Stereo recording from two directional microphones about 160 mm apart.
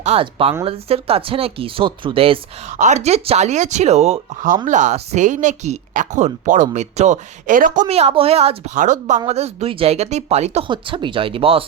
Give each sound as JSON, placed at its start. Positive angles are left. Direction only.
{"t": 0.0, "sound": "a woman's voice", "side_deg": -35}
{"t": 2.7, "sound": "a woman's voice", "side_deg": -45}
{"t": 7.9, "sound": "a woman's voice", "side_deg": -40}
{"t": 10.7, "sound": "a woman's voice", "side_deg": -30}